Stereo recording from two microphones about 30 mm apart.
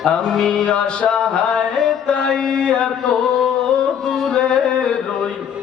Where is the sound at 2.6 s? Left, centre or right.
Left.